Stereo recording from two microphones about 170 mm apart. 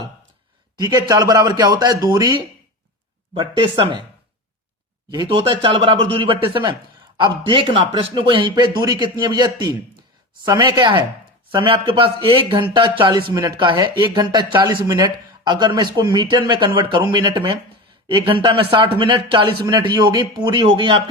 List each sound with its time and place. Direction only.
0.8 s speech: 25° right (ahead or behind)
5.1 s speech: 30° right (ahead or behind)